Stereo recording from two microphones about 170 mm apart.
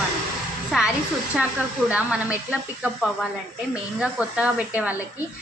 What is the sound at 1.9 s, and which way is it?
A woman's voice, 5° right (ahead or behind).